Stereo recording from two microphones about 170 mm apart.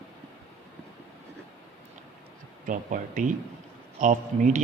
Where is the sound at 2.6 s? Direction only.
50° right (ahead or behind).